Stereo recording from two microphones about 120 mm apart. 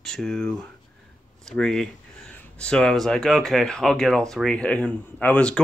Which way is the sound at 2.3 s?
5° left (ahead or behind).